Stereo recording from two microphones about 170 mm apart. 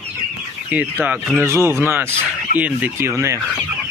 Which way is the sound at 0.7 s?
10° right (ahead or behind).